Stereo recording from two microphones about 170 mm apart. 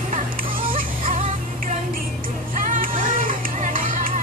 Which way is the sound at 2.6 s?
55° right (ahead or behind).